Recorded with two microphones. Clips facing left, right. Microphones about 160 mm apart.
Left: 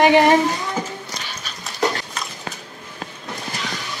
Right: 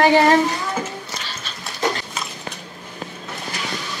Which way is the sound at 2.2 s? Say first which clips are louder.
Even; centre (ahead or behind).